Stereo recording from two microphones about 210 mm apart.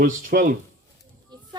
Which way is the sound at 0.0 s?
40° right (ahead or behind).